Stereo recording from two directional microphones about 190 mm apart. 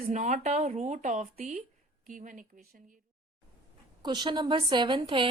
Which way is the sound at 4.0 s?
20° right (ahead or behind).